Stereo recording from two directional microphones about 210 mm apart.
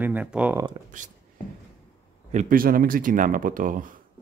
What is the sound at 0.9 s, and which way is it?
Speech, 35° right (ahead or behind).